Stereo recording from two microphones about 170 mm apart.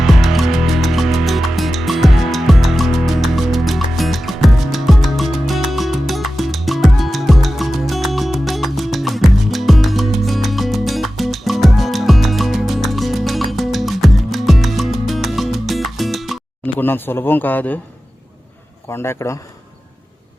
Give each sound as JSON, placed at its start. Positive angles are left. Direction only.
{"t": 0.0, "sound": "music", "side_deg": 0}
{"t": 16.7, "sound": "speech", "side_deg": 10}
{"t": 18.9, "sound": "speech", "side_deg": 15}